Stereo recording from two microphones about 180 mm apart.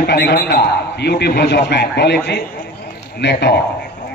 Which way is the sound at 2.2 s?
60° left (ahead or behind).